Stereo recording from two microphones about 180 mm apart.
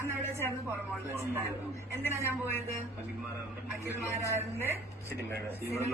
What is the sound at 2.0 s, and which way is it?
Speech, 10° right (ahead or behind).